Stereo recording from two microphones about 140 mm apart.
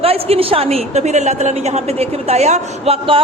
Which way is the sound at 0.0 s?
45° right (ahead or behind).